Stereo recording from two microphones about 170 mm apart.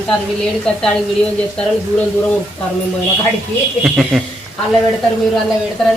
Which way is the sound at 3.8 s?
Centre (ahead or behind).